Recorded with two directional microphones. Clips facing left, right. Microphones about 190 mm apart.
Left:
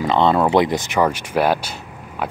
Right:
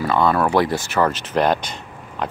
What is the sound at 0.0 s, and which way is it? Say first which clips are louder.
Speech: left 2 dB; 20° left (ahead or behind).